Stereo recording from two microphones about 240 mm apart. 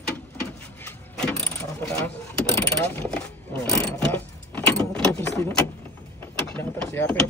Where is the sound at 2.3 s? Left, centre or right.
Centre.